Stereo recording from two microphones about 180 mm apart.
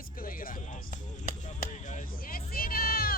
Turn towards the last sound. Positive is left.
turn(degrees=55)  # may be behind; listen again after turning